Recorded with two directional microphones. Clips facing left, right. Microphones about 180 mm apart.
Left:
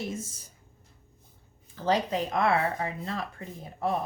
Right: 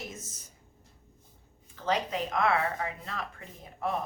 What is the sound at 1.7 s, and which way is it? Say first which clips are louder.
Speech: left 4 dB; 35° left (ahead or behind).